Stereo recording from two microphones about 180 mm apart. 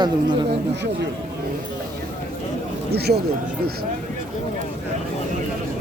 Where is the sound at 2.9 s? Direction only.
60° right (ahead or behind).